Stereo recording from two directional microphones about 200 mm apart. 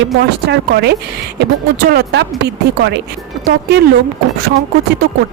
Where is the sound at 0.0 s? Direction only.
55° right (ahead or behind).